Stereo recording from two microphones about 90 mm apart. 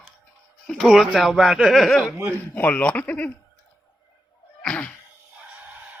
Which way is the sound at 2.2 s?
30° right (ahead or behind).